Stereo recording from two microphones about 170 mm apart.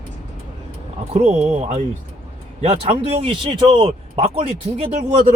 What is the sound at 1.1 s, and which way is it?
Speech, 40° right (ahead or behind).